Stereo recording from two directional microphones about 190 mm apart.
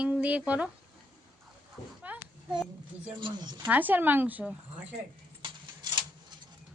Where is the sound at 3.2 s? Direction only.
25° right (ahead or behind).